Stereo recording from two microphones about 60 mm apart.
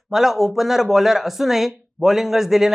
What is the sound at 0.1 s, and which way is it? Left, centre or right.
Speech, centre.